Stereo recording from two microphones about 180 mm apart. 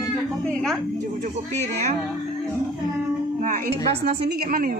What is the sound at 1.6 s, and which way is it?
Speech, 40° right (ahead or behind).